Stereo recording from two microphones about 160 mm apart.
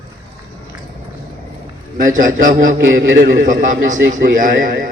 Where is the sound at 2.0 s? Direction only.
55° right (ahead or behind).